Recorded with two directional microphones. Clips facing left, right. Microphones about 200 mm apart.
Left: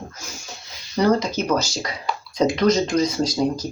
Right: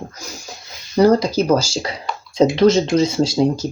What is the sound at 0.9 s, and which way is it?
Speech, 35° right (ahead or behind).